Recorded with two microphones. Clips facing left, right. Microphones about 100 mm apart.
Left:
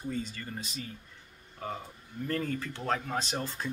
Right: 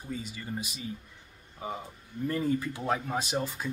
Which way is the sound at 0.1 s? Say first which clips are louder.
Right 3 dB; 10° right (ahead or behind).